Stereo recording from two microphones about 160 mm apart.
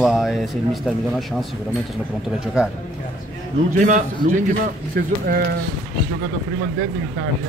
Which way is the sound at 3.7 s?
50° right (ahead or behind).